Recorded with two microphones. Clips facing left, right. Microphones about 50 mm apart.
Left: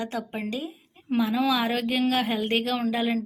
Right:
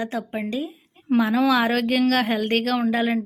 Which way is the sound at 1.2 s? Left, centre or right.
Right.